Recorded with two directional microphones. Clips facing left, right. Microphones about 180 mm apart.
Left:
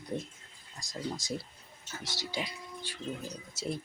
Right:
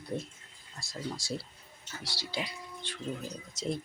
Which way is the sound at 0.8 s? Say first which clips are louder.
Left 1 dB; 15° left (ahead or behind).